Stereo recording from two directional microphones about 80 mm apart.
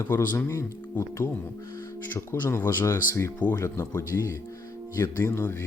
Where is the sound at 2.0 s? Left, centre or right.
Left.